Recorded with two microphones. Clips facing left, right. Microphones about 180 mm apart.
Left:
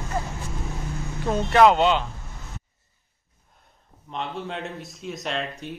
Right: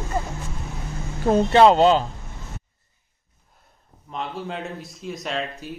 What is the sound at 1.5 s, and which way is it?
Speech, 30° right (ahead or behind).